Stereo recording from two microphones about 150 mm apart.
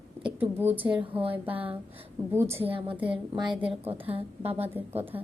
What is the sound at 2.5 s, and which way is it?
A woman's voice, 40° right (ahead or behind).